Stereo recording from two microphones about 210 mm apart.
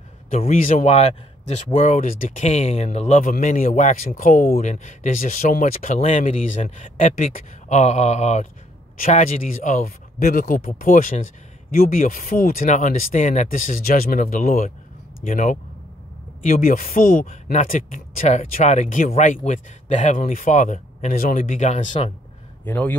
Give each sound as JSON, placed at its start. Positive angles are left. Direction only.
{"t": 0.3, "sound": "speech", "side_deg": 40}
{"t": 22.7, "sound": "a man's voice", "side_deg": 10}